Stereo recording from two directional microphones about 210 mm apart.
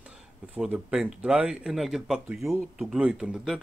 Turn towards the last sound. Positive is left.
turn(degrees=-5)  # may be behind; listen again after turning